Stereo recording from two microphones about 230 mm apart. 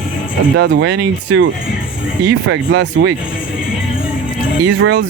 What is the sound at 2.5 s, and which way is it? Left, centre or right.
Speech, right.